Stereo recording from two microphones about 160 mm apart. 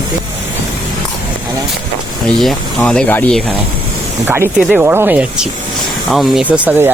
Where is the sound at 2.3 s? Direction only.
5° left (ahead or behind).